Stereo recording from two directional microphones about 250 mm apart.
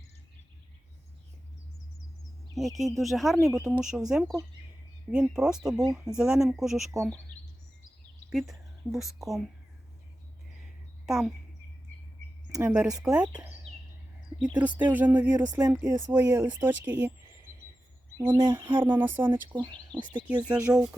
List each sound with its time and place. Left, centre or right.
2.7 s speech: centre
8.3 s speech: centre
10.6 s a sound: centre
12.5 s speech: centre
13.2 s speech: centre
14.8 s speech: centre
18.2 s speech: centre
20.5 s speech: centre